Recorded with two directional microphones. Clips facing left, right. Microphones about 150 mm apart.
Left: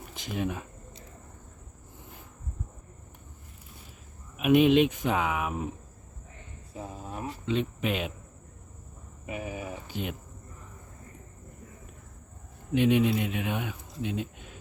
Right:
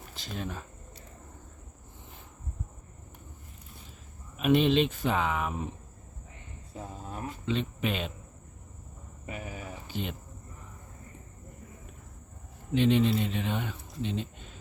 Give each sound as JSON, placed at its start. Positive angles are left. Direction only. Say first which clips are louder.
{"t": 0.1, "sound": "speech", "louder": "left 6 dB", "side_deg": 10}
{"t": 4.4, "sound": "speech", "louder": "left 3 dB", "side_deg": 10}
{"t": 7.2, "sound": "cricket", "louder": "left 2 dB", "side_deg": 10}
{"t": 9.2, "sound": "speech", "louder": "left 4 dB", "side_deg": 15}
{"t": 12.7, "sound": "speech", "louder": "left 1 dB", "side_deg": 10}